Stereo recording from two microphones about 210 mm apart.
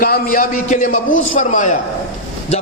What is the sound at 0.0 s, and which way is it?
A man's voice, 40° left (ahead or behind).